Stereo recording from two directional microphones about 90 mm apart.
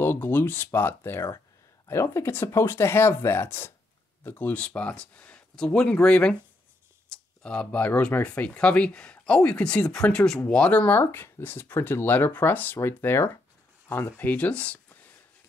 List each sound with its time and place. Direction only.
0.0 s speech: 25° left (ahead or behind)